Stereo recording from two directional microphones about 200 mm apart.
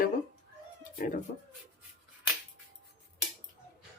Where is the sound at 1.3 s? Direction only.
40° left (ahead or behind).